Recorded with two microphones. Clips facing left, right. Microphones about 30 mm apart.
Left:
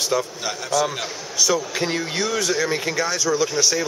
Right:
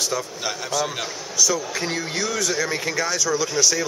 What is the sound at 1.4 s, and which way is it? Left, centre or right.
Mantra, left.